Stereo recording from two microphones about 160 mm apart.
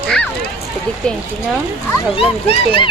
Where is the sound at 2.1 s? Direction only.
35° left (ahead or behind).